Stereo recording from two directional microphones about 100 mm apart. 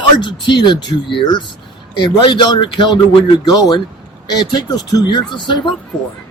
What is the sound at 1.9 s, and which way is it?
Speech, 55° left (ahead or behind).